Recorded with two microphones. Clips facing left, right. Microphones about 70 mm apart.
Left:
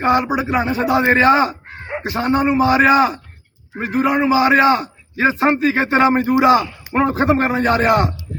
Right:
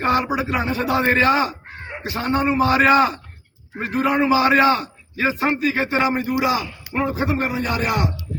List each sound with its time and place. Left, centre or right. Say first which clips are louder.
0.0 s a man's voice: left 3 dB; centre; by 1.5 s left
2.1 s a man's voice: left 3 dB; centre
5.1 s a man's voice: left 5 dB; left
6.9 s a man's voice: left 6 dB; left